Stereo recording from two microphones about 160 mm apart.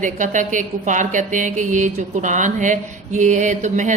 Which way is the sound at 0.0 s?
55° right (ahead or behind).